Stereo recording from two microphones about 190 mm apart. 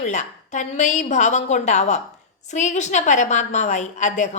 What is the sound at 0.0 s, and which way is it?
A woman's voice, 40° left (ahead or behind).